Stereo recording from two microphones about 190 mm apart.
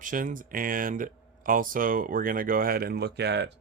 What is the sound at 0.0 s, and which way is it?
Speech, 45° right (ahead or behind).